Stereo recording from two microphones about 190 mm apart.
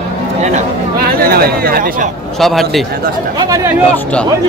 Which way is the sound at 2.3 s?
Centre (ahead or behind).